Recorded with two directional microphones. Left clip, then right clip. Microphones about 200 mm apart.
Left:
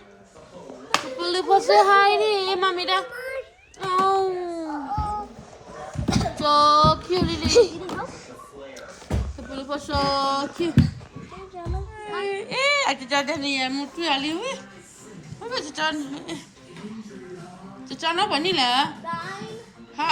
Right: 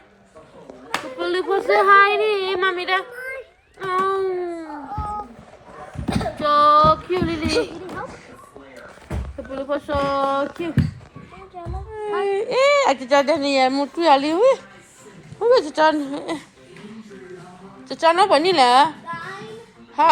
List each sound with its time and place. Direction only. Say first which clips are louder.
0.9 s a child's voice: even; 5° left (ahead or behind)
3.2 s a sound: even; 5° left (ahead or behind)
4.0 s baby cry: left 2 dB; 15° left (ahead or behind)
4.7 s a sound: left 2 dB; centre (ahead or behind)
6.4 s female singing: right 3 dB; 15° left (ahead or behind)
9.5 s speech: right 5 dB; 5° left (ahead or behind)
11.9 s speech: right 7 dB; centre (ahead or behind)
17.8 s speech: right 8 dB; 10° left (ahead or behind)
20.0 s speech: right 9 dB; 10° left (ahead or behind)